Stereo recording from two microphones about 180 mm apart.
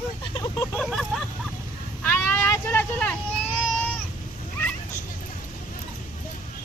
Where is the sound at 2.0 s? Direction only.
10° left (ahead or behind).